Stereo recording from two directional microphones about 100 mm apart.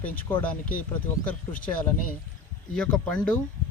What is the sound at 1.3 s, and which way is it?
Speech, 15° left (ahead or behind).